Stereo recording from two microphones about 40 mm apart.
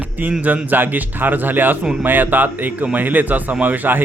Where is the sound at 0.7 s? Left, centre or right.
Right.